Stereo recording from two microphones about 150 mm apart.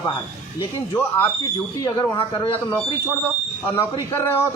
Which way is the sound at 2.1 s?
25° left (ahead or behind).